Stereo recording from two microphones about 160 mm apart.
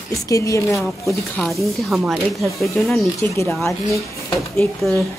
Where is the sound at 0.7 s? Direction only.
Centre (ahead or behind).